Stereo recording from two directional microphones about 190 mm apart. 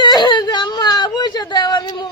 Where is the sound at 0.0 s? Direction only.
20° left (ahead or behind).